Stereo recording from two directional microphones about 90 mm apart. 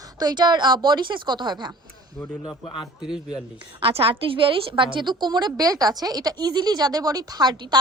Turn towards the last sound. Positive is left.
turn(degrees=-55)  # may be behind; listen again after turning